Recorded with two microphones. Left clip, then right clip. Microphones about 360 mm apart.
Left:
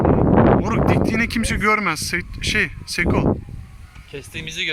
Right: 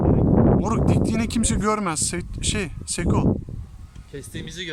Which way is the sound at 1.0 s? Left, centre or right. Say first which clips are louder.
Left 4 dB; centre.